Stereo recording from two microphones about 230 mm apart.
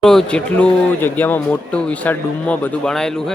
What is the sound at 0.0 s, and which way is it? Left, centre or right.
Speech, centre.